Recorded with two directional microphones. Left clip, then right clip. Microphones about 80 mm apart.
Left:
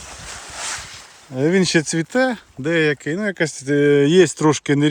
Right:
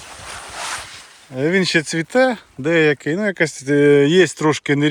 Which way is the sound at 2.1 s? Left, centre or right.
Left.